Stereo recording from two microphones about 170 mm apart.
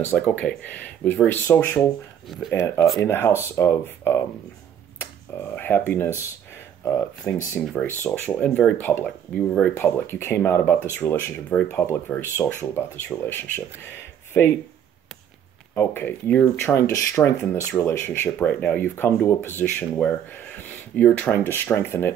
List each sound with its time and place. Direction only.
0.0 s speech: 10° left (ahead or behind)
2.2 s speech: centre (ahead or behind)
2.5 s speech: 15° left (ahead or behind)
15.7 s speech: 15° left (ahead or behind)